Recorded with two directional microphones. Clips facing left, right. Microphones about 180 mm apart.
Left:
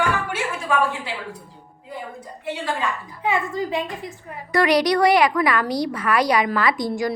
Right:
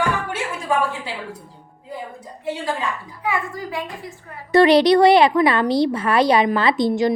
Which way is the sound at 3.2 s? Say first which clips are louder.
Left 2 dB; 25° left (ahead or behind).